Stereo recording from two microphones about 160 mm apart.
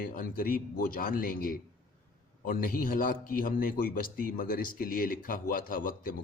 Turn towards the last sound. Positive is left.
turn(degrees=60)  # may be behind; listen again after turning